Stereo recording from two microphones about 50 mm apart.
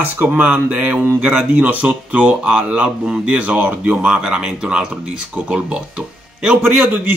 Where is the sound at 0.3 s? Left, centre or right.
Right.